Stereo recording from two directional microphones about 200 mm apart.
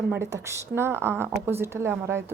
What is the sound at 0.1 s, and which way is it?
Speech, 15° right (ahead or behind).